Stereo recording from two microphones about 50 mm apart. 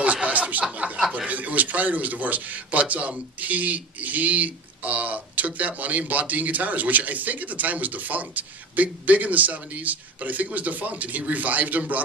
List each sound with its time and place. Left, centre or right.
0.0 s snicker: right
1.1 s a man's voice: right